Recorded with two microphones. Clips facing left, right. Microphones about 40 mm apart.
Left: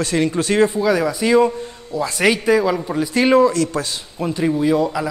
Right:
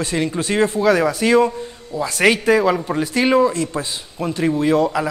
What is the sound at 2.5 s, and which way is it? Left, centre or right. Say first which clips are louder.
Speech: left 1 dB; centre.